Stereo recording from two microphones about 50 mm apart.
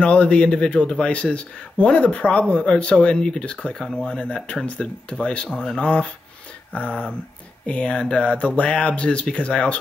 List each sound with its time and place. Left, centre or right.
0.0 s a man's voice: left